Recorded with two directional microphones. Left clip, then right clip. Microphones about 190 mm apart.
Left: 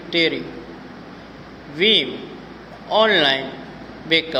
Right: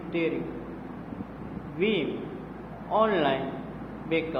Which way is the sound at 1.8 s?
30° left (ahead or behind).